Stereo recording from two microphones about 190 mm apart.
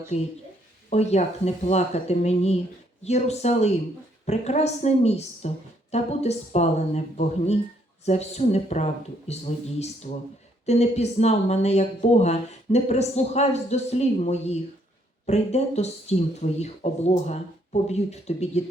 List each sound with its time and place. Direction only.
0.1 s speech: 35° left (ahead or behind)